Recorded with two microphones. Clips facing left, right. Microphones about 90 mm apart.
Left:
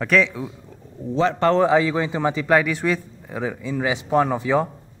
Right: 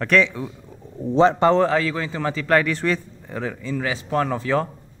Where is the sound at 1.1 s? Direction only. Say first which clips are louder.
Right 4 dB; 30° right (ahead or behind).